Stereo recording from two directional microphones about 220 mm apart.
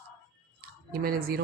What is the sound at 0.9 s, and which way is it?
Speech, 40° right (ahead or behind).